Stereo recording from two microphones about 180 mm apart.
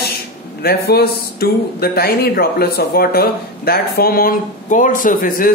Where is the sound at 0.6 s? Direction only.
60° left (ahead or behind).